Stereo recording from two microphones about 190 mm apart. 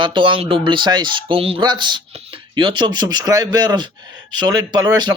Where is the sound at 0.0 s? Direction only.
25° right (ahead or behind).